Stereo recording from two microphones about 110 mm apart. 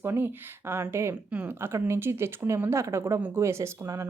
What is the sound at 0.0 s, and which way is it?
Speech, 20° right (ahead or behind).